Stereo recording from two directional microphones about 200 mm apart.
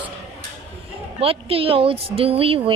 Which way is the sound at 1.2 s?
30° right (ahead or behind).